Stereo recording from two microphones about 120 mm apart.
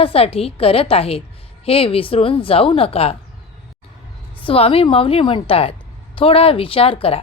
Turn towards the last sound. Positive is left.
turn(degrees=50)  # may be behind; listen again after turning